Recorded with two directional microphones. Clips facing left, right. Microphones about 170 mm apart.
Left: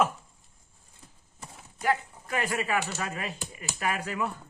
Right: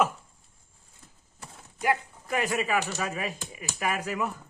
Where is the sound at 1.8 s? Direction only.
10° right (ahead or behind).